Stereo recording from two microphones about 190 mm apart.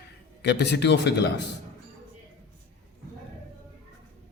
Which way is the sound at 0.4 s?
60° left (ahead or behind).